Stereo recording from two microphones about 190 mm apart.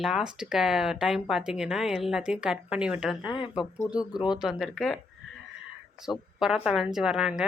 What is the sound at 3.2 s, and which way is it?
Speech, 25° left (ahead or behind).